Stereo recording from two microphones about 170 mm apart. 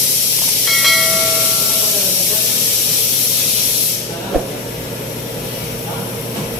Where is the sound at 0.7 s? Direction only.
Centre (ahead or behind).